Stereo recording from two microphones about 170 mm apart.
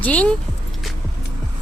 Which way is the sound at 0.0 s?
10° left (ahead or behind).